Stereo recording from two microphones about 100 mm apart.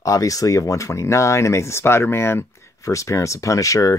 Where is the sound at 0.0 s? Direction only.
35° left (ahead or behind).